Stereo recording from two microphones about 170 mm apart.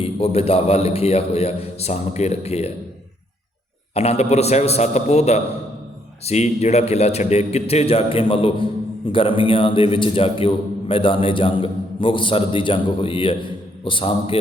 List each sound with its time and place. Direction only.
0.0 s a man's voice: 35° left (ahead or behind)
3.9 s a man's voice: 40° left (ahead or behind)